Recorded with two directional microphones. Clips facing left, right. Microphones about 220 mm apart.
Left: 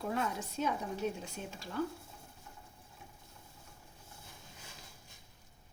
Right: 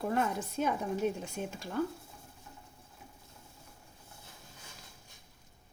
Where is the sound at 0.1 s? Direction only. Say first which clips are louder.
Right 4 dB; 55° right (ahead or behind).